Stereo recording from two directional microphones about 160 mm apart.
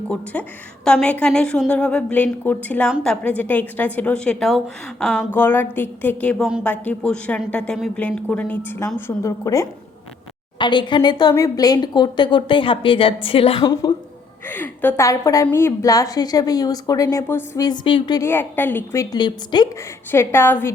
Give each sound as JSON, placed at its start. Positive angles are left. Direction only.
{"t": 0.3, "sound": "a woman's voice", "side_deg": 10}
{"t": 5.3, "sound": "a woman's voice", "side_deg": 10}
{"t": 10.6, "sound": "speech", "side_deg": 30}
{"t": 14.4, "sound": "speech", "side_deg": 10}
{"t": 17.7, "sound": "speech", "side_deg": 30}
{"t": 18.3, "sound": "a woman's voice", "side_deg": 15}
{"t": 19.1, "sound": "speech", "side_deg": 25}
{"t": 20.1, "sound": "a woman's voice", "side_deg": 15}